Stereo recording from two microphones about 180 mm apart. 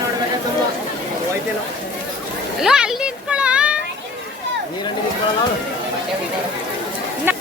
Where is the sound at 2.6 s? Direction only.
5° right (ahead or behind).